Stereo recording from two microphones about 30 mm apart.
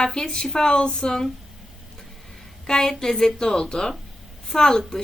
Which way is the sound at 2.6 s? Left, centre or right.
Centre.